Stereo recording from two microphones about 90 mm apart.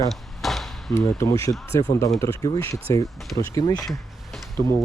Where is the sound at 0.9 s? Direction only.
30° left (ahead or behind).